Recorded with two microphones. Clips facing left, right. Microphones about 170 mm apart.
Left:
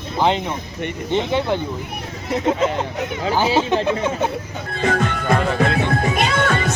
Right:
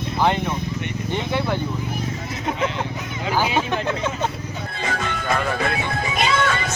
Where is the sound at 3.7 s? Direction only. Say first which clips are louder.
Left 5 dB; 20° left (ahead or behind).